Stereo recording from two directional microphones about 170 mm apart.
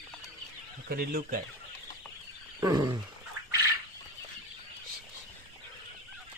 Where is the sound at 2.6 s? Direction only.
25° right (ahead or behind).